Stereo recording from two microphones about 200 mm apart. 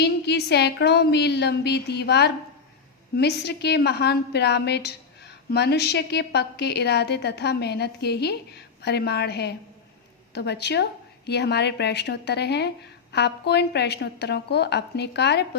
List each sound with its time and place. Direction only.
0.0 s a woman's voice: 55° left (ahead or behind)